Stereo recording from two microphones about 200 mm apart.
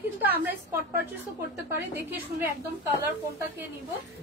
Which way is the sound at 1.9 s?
10° right (ahead or behind).